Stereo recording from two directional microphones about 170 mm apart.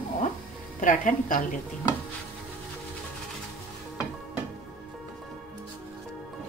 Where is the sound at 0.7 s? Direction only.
50° left (ahead or behind).